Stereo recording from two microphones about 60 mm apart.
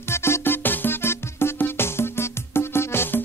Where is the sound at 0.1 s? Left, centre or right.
Left.